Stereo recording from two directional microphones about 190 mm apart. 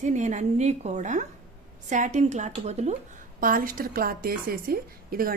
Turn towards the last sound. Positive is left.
turn(degrees=-50)  # may be behind; listen again after turning